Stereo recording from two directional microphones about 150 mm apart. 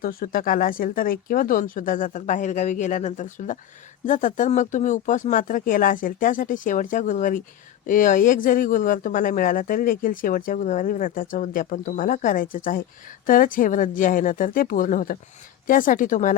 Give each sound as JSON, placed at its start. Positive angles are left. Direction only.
{"t": 0.0, "sound": "speech", "side_deg": 75}